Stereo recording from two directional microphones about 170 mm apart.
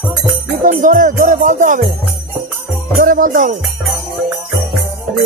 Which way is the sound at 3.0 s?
50° right (ahead or behind).